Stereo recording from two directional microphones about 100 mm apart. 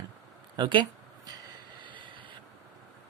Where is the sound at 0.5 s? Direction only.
50° right (ahead or behind).